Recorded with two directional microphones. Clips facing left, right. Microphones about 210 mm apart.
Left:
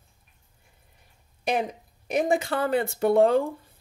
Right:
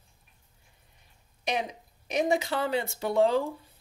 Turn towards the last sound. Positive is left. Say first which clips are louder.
# left 5 dB
turn(degrees=55)  # may be behind; listen again after turning